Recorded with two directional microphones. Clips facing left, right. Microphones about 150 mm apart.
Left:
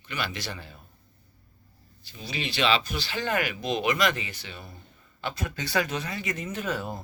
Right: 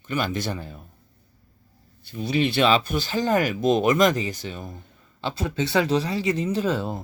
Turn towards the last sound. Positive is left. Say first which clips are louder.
# right 7 dB
turn(degrees=-25)  # may be behind; listen again after turning